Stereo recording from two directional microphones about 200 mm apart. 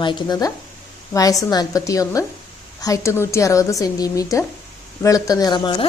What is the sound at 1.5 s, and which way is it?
A woman's voice, 20° left (ahead or behind).